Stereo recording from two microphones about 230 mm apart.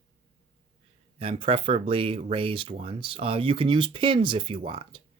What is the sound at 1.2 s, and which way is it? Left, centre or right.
Speech, right.